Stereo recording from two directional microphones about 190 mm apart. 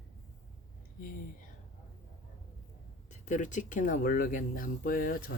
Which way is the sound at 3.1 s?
40° left (ahead or behind).